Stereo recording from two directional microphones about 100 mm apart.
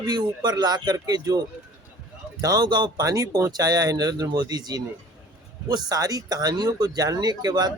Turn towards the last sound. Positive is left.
turn(degrees=-40)  # may be behind; listen again after turning